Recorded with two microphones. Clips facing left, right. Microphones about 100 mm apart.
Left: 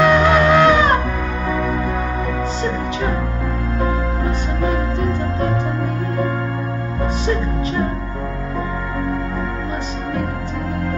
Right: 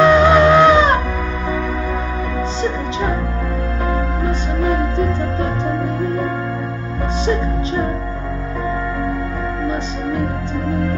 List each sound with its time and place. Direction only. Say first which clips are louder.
0.0 s music: right 3 dB; 20° right (ahead or behind)